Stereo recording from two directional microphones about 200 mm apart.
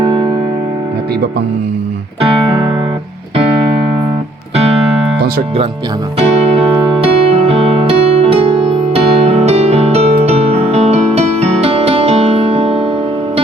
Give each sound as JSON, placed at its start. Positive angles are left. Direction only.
{"t": 0.0, "sound": "music", "side_deg": -25}
{"t": 4.5, "sound": "music", "side_deg": -30}
{"t": 6.1, "sound": "music", "side_deg": -30}